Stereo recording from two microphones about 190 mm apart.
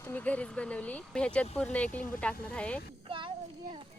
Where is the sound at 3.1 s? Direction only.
25° right (ahead or behind).